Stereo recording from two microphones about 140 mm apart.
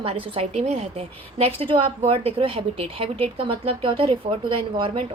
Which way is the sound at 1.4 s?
40° right (ahead or behind).